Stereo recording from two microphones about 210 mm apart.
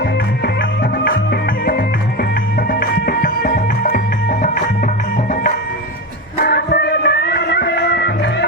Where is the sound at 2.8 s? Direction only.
45° left (ahead or behind).